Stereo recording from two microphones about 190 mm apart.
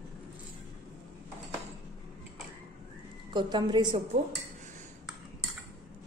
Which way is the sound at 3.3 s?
25° right (ahead or behind).